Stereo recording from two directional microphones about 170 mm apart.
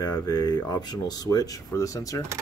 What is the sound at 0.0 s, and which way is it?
Speech, 25° left (ahead or behind).